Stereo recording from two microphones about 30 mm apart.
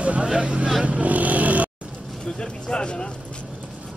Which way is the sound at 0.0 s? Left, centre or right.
Right.